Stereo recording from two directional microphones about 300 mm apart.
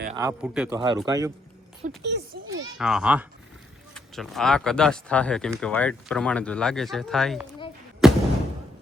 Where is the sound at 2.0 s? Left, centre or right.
Right.